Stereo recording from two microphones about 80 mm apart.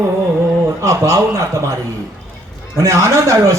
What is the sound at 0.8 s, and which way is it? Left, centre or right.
A man's voice, right.